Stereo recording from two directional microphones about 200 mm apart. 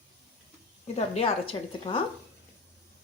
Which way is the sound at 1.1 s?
30° left (ahead or behind).